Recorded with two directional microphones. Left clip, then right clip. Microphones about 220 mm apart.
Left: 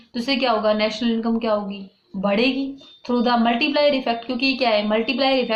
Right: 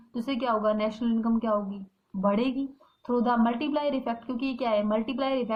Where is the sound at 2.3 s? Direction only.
45° right (ahead or behind).